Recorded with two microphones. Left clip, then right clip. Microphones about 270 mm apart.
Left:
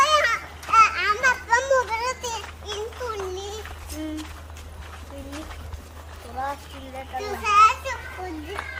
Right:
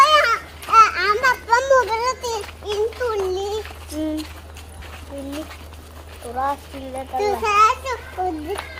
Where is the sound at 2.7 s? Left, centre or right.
Right.